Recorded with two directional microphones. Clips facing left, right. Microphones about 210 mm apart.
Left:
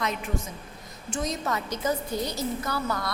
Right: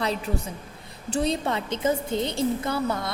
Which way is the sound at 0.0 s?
35° right (ahead or behind).